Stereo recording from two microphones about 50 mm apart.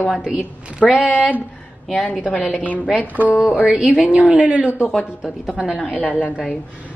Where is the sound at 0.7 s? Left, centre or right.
Centre.